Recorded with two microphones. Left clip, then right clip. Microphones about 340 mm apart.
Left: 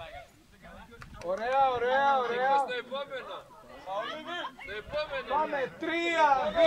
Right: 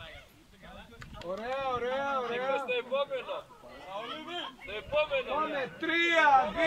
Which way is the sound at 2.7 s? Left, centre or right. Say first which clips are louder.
Right 4 dB; centre.